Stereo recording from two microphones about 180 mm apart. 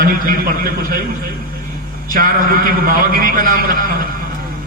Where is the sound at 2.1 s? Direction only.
50° right (ahead or behind).